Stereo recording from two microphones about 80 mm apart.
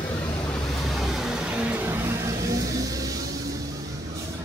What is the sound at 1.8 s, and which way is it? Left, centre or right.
Vehicle, right.